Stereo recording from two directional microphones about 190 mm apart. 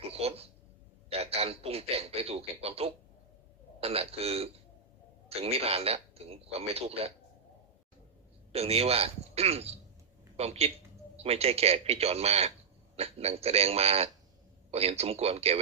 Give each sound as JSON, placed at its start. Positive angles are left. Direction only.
{"t": 0.0, "sound": "a sound", "side_deg": -30}
{"t": 1.1, "sound": "a man's voice", "side_deg": -30}
{"t": 8.5, "sound": "a man's voice", "side_deg": -30}